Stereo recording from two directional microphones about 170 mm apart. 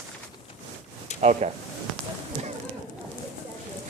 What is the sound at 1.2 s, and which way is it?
Speech, 40° right (ahead or behind).